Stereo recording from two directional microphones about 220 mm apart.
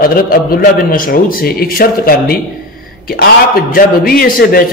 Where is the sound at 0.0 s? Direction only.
40° left (ahead or behind).